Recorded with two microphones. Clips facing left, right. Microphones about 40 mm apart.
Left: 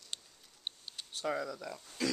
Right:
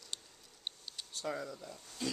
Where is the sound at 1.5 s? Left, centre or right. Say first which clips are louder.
Left 5 dB; left.